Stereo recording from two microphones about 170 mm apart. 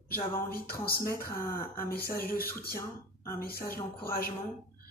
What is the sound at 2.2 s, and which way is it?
Speech, 60° left (ahead or behind).